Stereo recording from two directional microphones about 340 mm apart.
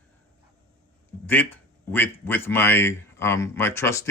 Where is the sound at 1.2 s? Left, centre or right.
Centre.